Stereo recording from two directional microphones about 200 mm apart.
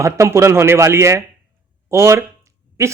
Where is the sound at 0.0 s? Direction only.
15° right (ahead or behind).